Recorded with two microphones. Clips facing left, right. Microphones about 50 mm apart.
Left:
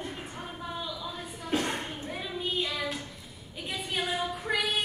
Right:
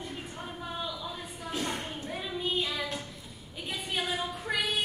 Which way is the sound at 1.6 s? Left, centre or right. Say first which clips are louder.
Left 1 dB; centre.